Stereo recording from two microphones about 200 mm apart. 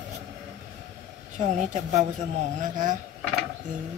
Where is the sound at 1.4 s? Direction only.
35° right (ahead or behind).